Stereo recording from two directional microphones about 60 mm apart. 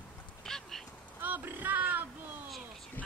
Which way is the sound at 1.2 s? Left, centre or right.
Right.